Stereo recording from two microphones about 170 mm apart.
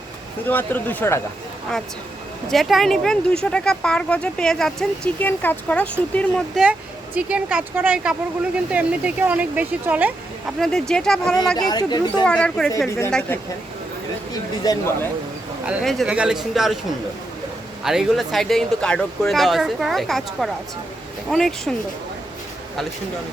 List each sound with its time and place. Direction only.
0.4 s speech: 10° left (ahead or behind)
2.5 s speech: centre (ahead or behind)
7.2 s speech: 5° right (ahead or behind)
10.6 s speech: 5° left (ahead or behind)
11.5 s speech: 25° left (ahead or behind)
12.2 s speech: 5° left (ahead or behind)
14.6 s speech: 20° left (ahead or behind)
15.6 s speech: centre (ahead or behind)
17.8 s speech: centre (ahead or behind)